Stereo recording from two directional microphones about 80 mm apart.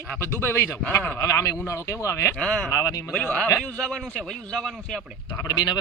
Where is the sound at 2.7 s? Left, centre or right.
Left.